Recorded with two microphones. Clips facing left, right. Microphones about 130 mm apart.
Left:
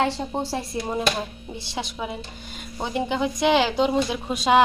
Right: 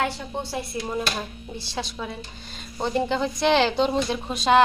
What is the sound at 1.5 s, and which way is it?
A woman's voice, 20° left (ahead or behind).